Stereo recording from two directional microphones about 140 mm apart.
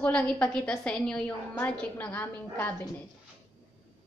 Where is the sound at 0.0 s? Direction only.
10° left (ahead or behind).